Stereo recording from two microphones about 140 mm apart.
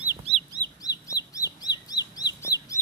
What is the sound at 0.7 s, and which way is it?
Bird, 25° left (ahead or behind).